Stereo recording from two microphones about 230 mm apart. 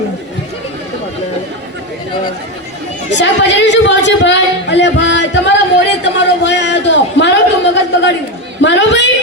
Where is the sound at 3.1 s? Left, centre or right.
Left.